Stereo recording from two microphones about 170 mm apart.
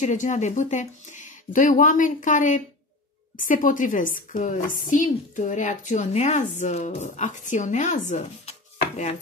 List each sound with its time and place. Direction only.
0.0 s a woman's voice: 45° left (ahead or behind)